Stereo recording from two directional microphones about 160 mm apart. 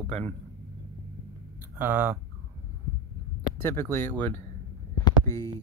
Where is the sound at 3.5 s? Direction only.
15° left (ahead or behind).